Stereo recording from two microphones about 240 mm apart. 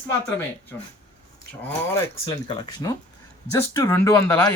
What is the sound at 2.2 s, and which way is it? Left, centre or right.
Speech, centre.